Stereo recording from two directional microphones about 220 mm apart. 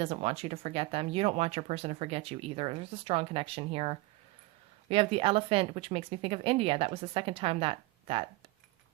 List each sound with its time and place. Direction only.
0.0 s speech: 30° right (ahead or behind)